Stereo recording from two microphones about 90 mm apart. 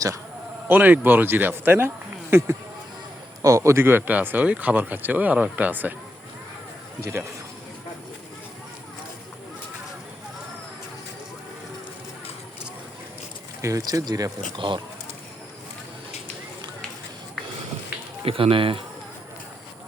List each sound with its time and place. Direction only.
0.7 s speech: 20° right (ahead or behind)
7.0 s a man's voice: 30° right (ahead or behind)
13.6 s speech: 35° right (ahead or behind)
18.3 s speech: 90° right